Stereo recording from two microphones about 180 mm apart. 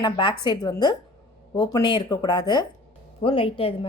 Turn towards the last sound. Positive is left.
turn(degrees=30)  # may be behind; listen again after turning